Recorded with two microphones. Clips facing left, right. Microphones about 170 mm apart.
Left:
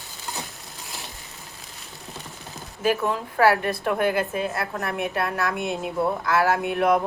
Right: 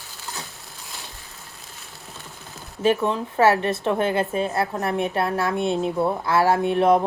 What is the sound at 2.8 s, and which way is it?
A woman's voice, 25° right (ahead or behind).